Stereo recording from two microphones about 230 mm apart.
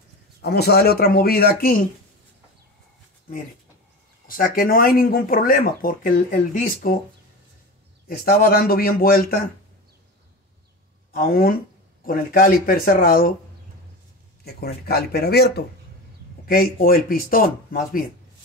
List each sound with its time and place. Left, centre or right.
0.4 s speech: left
4.3 s speech: left
8.1 s speech: left
11.1 s speech: left
14.4 s speech: left